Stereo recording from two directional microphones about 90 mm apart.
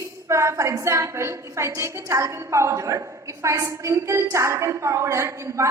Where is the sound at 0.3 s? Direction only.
35° right (ahead or behind).